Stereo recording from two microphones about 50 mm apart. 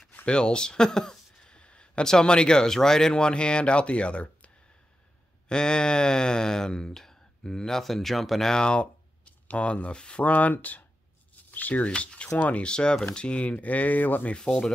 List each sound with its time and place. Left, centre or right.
0.1 s speech: left
5.5 s speech: centre
8.5 s speech: centre
10.2 s speech: left
14.3 s speech: centre